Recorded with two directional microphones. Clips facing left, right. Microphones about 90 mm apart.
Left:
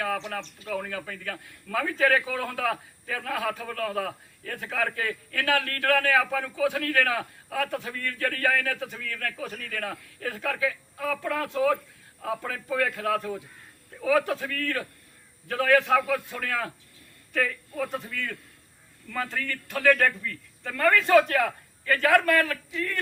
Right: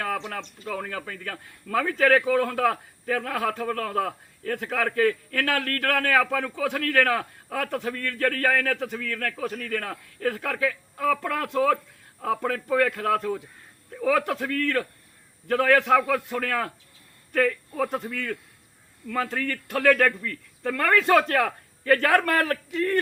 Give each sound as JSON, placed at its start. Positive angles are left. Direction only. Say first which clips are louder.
{"t": 0.3, "sound": "a man's voice", "louder": "even", "side_deg": -40}
{"t": 18.1, "sound": "a man's voice", "louder": "right 3 dB", "side_deg": -25}
{"t": 19.2, "sound": "a man's voice", "louder": "right 2 dB", "side_deg": -40}
{"t": 20.1, "sound": "a man's voice", "louder": "right 2 dB", "side_deg": -55}